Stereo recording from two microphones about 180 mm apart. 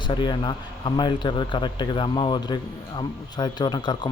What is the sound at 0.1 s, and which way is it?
Speech, 25° left (ahead or behind).